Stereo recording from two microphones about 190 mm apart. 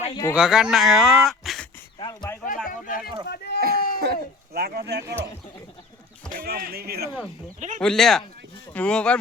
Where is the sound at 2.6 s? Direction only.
45° left (ahead or behind).